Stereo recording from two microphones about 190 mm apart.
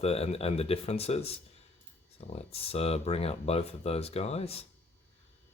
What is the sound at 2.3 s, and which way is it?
Speech, 30° left (ahead or behind).